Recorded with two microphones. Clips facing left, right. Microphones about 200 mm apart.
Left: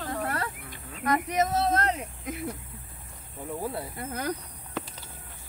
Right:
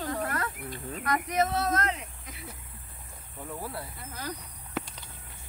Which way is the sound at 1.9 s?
50° left (ahead or behind).